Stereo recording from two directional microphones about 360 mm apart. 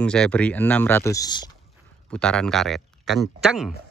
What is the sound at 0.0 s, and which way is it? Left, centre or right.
Speech, centre.